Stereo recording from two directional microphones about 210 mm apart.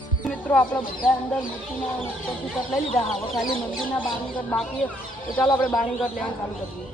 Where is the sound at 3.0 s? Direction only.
Centre (ahead or behind).